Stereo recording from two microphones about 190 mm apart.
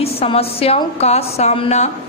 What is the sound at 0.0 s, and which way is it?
A woman's voice, 30° left (ahead or behind).